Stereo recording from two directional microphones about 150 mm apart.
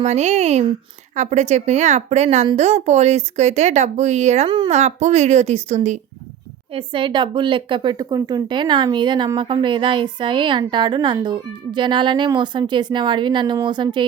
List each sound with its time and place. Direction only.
0.0 s speech: 50° right (ahead or behind)
4.4 s speech: 30° right (ahead or behind)
4.7 s speech: 50° right (ahead or behind)
6.7 s speech: 35° right (ahead or behind)